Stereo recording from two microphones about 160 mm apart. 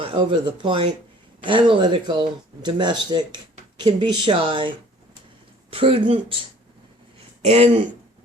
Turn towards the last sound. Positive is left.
turn(degrees=-40)  # may be behind; listen again after turning